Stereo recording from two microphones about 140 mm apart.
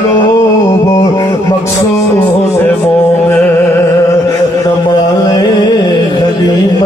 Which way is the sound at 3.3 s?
15° left (ahead or behind).